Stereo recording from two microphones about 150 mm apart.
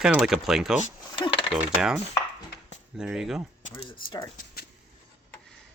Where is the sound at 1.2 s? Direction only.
35° left (ahead or behind).